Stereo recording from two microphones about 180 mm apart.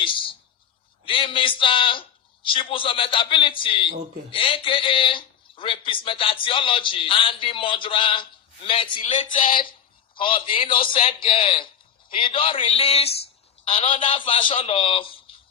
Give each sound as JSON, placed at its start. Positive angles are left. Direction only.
{"t": 0.0, "sound": "a man's voice", "side_deg": 30}